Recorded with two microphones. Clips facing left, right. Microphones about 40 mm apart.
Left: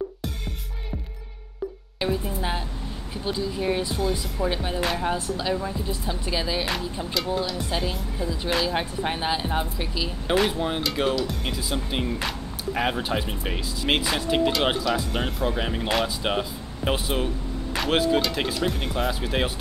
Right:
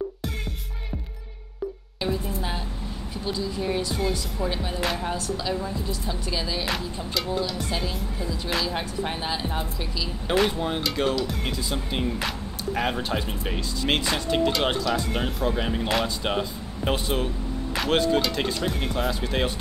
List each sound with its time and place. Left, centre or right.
2.0 s speech: centre
5.0 s speech: left
7.7 s speech: centre
8.7 s speech: centre
10.2 s speech: centre